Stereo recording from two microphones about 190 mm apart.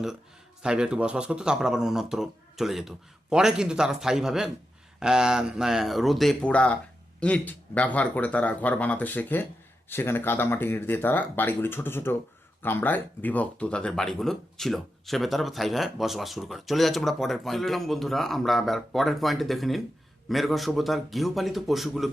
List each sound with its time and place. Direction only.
0.6 s speech: 5° right (ahead or behind)